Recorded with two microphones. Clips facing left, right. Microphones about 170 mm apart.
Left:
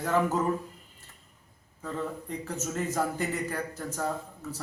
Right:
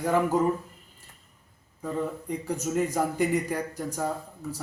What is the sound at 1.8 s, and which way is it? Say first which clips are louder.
A man's voice: right 4 dB; 15° right (ahead or behind).